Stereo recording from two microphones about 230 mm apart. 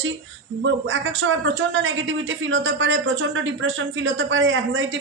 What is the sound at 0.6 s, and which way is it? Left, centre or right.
A woman's voice, right.